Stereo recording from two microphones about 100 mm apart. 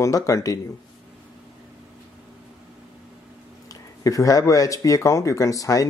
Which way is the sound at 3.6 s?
35° left (ahead or behind).